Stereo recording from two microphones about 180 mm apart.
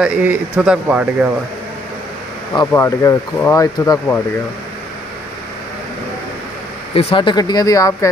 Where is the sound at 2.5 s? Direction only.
15° left (ahead or behind).